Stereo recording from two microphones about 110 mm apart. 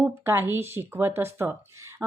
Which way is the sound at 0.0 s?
20° right (ahead or behind).